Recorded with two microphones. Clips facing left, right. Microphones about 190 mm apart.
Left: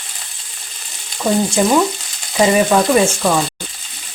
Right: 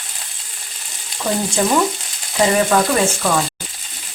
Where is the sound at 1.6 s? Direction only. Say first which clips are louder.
Even; 15° left (ahead or behind).